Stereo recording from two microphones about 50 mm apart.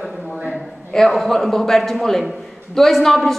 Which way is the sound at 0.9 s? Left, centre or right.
Centre.